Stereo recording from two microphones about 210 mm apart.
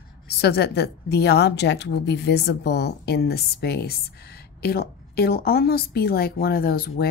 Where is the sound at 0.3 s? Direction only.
50° left (ahead or behind).